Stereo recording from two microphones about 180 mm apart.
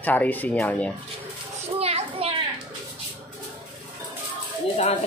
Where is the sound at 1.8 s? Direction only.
35° right (ahead or behind).